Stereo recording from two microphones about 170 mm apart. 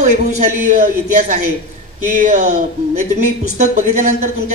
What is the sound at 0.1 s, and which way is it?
A woman's voice, 45° right (ahead or behind).